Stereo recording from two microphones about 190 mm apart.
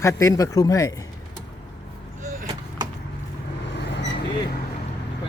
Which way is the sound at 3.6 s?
65° left (ahead or behind).